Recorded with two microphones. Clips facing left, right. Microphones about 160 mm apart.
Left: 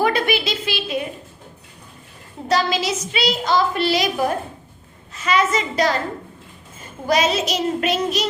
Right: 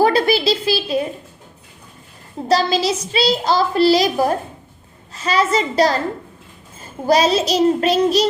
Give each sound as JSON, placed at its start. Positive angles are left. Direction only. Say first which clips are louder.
{"t": 0.0, "sound": "a child's voice", "louder": "right 5 dB", "side_deg": -35}
{"t": 2.5, "sound": "a child's voice", "louder": "right 3 dB", "side_deg": -35}
{"t": 7.1, "sound": "a child's voice", "louder": "right 4 dB", "side_deg": -35}